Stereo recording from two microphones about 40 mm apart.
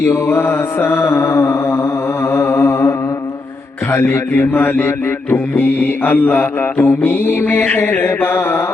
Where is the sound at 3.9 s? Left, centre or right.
Left.